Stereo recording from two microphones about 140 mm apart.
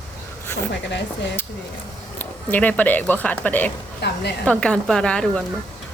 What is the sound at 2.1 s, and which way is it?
A woman's voice, 10° left (ahead or behind).